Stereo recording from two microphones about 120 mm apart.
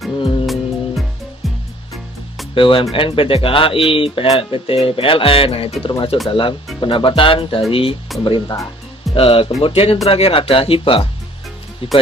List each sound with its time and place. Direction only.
0.2 s music: 45° left (ahead or behind)
0.4 s music: centre (ahead or behind)
2.6 s speech: 45° left (ahead or behind)